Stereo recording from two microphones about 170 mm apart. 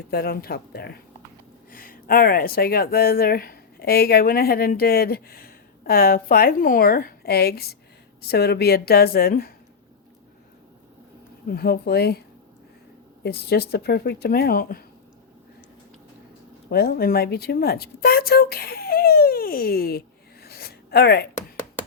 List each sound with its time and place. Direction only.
0.1 s a woman's voice: 65° left (ahead or behind)
1.7 s a woman's voice: 55° left (ahead or behind)
11.4 s speech: 65° left (ahead or behind)
13.2 s speech: 65° left (ahead or behind)
16.6 s speech: 65° left (ahead or behind)
20.4 s a sound: 65° left (ahead or behind)